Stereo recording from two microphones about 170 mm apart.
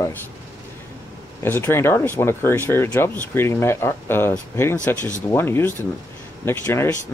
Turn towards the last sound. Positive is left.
turn(degrees=15)  # may be behind; listen again after turning